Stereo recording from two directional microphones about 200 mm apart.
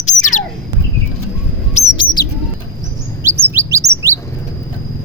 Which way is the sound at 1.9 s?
25° left (ahead or behind).